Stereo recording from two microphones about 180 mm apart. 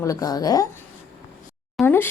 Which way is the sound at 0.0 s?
20° left (ahead or behind).